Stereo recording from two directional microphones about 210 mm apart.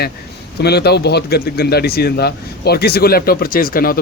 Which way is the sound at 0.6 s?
50° left (ahead or behind).